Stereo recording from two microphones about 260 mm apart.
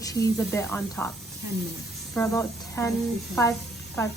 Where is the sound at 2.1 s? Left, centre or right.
Centre.